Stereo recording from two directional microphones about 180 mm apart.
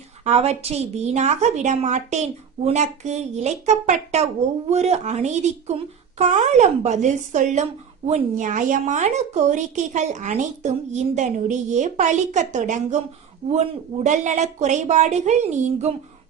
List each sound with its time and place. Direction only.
0.3 s a woman's voice: 35° right (ahead or behind)